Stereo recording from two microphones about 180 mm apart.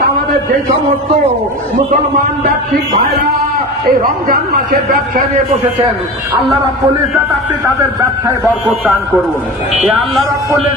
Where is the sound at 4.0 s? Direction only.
55° right (ahead or behind).